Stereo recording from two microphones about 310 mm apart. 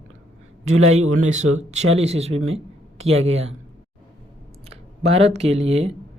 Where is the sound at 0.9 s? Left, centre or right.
Right.